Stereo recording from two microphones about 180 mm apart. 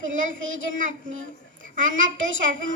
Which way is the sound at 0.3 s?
90° right.